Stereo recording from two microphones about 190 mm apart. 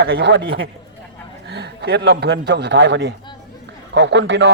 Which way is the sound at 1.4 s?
65° right (ahead or behind).